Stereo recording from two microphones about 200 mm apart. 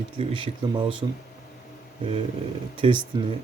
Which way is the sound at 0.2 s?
25° right (ahead or behind).